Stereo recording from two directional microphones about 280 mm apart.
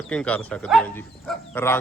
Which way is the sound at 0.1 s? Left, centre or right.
Centre.